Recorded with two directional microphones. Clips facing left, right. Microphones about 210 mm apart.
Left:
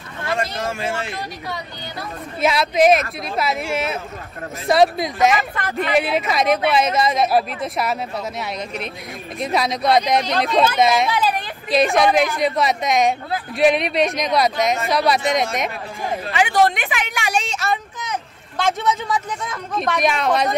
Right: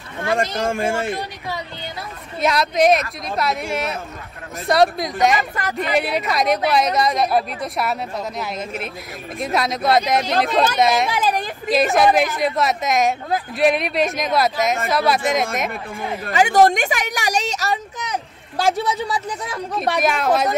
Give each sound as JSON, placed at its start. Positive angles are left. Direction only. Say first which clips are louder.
{"t": 0.3, "sound": "speech", "louder": "right 3 dB", "side_deg": -50}
{"t": 2.4, "sound": "speech", "louder": "left 1 dB", "side_deg": 5}
{"t": 16.3, "sound": "speech", "louder": "right 3 dB", "side_deg": -45}
{"t": 20.0, "sound": "speech", "louder": "right 1 dB", "side_deg": 0}